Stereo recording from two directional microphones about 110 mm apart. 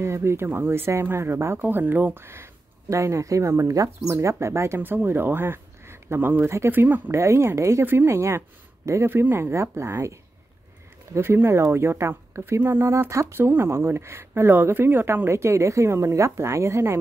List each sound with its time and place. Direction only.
0.0 s speech: 25° right (ahead or behind)
11.1 s speech: 20° right (ahead or behind)